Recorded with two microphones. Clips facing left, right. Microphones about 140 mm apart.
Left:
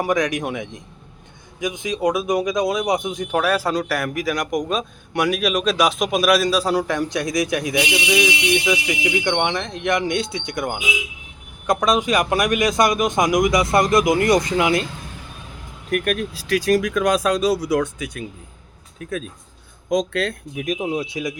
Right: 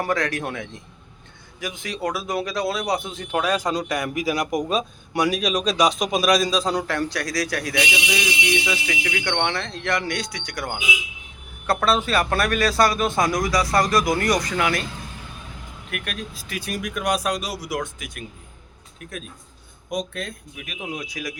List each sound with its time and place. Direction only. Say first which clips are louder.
0.0 s a man's voice: left 4 dB; 15° left (ahead or behind)
4.2 s speech: right 2 dB; 25° right (ahead or behind)
4.5 s a man's voice: left 1 dB; centre (ahead or behind); by 14.8 s 20° left (ahead or behind)
15.9 s speech: left 11 dB; 45° left (ahead or behind)
16.3 s speech: left 13 dB; 85° left
19.9 s speech: left 8 dB; 85° left
20.6 s a man's voice: left 10 dB; 40° left (ahead or behind)